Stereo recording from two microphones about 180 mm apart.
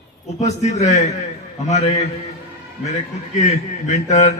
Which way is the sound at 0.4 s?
40° left (ahead or behind).